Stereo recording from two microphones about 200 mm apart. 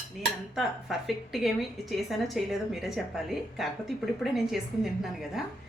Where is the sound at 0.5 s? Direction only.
Centre (ahead or behind).